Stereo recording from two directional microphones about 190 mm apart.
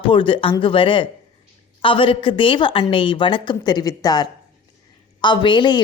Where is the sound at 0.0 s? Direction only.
25° left (ahead or behind).